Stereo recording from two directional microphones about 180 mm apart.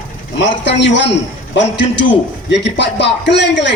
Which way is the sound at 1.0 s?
80° left.